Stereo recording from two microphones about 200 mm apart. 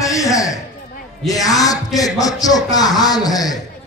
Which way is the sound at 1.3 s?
15° left (ahead or behind).